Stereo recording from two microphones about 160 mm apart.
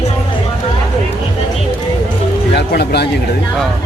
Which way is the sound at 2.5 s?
90° left.